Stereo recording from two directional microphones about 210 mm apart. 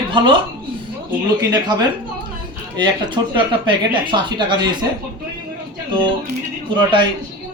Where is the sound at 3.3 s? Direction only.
20° right (ahead or behind).